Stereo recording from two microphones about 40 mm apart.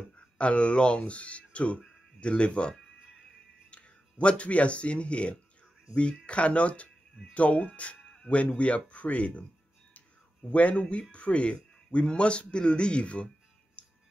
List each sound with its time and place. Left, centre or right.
0.4 s speech: left
3.7 s speech: left
10.5 s speech: left
13.8 s music: left